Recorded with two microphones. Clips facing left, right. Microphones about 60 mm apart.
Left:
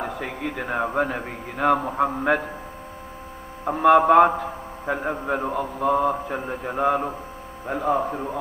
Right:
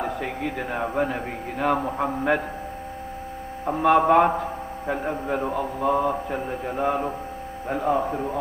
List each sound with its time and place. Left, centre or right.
0.0 s a sound: centre
0.7 s a man's voice: centre
3.7 s mantra: centre
5.3 s a man's voice: centre
5.5 s mantra: centre
6.3 s a man's voice: centre
7.7 s mantra: centre